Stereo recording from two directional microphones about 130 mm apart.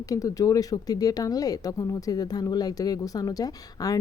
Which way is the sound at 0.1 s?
25° left (ahead or behind).